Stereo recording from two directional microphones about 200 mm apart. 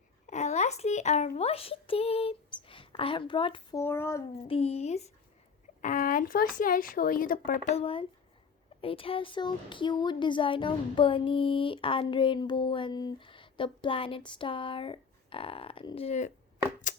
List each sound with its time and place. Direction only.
0.3 s a woman's voice: 35° left (ahead or behind)
3.8 s a child's voice: 10° left (ahead or behind)
4.4 s a child's voice: 30° left (ahead or behind)